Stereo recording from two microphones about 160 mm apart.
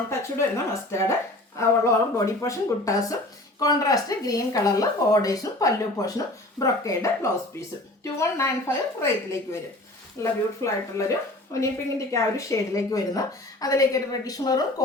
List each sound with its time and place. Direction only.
0.1 s a woman's voice: 20° left (ahead or behind)